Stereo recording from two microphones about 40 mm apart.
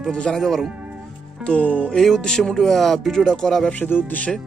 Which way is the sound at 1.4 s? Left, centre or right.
Left.